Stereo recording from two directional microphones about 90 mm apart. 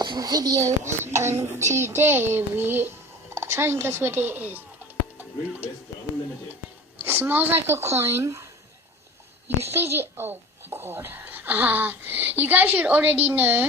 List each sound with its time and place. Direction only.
0.0 s a child's voice: 50° right (ahead or behind); by 4.6 s 20° right (ahead or behind)
7.0 s a child's voice: 20° right (ahead or behind)
9.7 s a child's voice: 30° right (ahead or behind)